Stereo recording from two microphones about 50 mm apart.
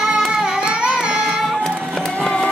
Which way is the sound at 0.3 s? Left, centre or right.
Centre.